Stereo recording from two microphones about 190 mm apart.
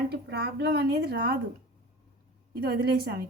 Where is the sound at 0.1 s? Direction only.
60° right (ahead or behind).